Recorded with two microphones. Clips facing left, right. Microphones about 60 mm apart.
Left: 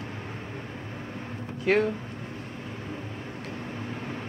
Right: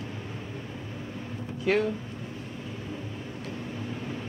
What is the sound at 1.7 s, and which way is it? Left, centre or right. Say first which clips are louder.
Speech: left 2 dB; left.